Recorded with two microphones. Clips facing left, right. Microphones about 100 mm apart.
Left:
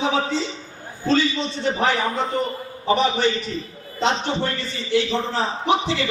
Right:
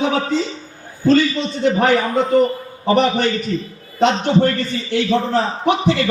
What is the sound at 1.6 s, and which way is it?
A man's voice, 55° right (ahead or behind).